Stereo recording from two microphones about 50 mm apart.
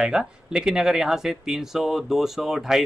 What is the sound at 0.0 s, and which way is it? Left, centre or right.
Speech, centre.